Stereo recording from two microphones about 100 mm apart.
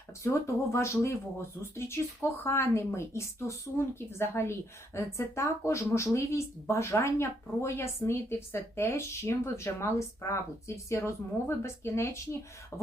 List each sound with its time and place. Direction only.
0.3 s speech: 30° left (ahead or behind)
2.4 s speech: 25° left (ahead or behind)